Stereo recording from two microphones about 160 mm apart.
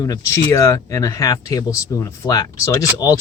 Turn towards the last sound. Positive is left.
turn(degrees=20)  # may be behind; listen again after turning